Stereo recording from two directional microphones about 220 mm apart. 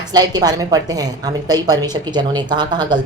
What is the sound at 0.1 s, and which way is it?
A woman's voice, 15° right (ahead or behind).